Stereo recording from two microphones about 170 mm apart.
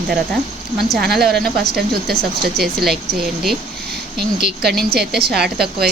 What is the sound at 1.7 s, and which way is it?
Speech, 65° right (ahead or behind).